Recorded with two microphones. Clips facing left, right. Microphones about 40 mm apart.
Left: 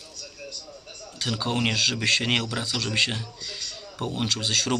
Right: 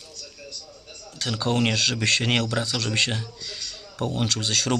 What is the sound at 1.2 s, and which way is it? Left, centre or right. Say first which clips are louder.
A man's voice: right 2 dB; centre.